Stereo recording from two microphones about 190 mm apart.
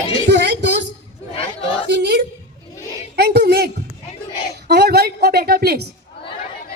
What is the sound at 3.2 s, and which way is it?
A woman's voice, 55° right (ahead or behind).